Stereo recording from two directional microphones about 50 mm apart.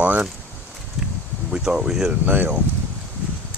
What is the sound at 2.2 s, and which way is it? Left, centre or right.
Speech, right.